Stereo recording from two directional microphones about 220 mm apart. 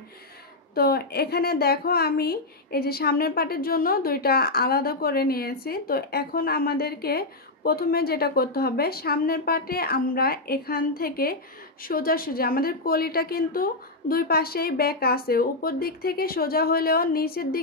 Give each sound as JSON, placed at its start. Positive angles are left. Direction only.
{"t": 0.7, "sound": "a woman's voice", "side_deg": 45}